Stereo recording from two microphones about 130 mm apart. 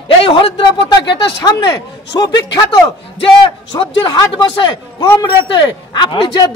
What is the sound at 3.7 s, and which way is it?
Speech, 35° left (ahead or behind).